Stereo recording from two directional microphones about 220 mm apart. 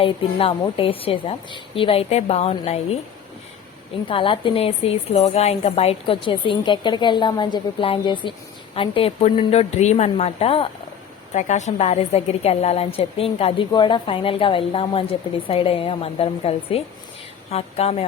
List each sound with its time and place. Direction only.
0.0 s a woman's voice: 25° left (ahead or behind)
4.1 s a woman's voice: 25° left (ahead or behind)